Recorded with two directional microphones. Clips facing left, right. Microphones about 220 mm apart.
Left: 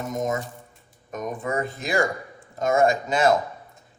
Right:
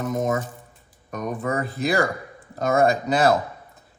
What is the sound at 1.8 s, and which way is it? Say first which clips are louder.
A man's voice: right 5 dB; 35° right (ahead or behind).